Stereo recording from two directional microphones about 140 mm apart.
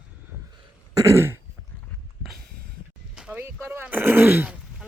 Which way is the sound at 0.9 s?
20° right (ahead or behind).